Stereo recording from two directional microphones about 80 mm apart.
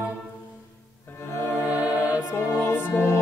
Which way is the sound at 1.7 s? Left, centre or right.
Centre.